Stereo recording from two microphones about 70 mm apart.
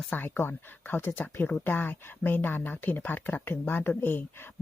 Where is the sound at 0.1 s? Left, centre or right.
Left.